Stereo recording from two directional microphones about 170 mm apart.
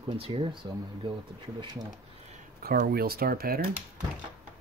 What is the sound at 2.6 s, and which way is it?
Speech, 60° right (ahead or behind).